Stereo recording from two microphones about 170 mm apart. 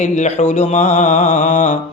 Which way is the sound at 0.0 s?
45° left (ahead or behind).